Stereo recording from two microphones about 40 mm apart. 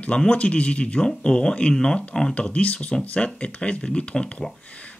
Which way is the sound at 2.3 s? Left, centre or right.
Left.